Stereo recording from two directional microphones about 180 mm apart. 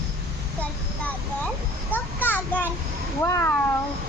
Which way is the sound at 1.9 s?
10° left (ahead or behind).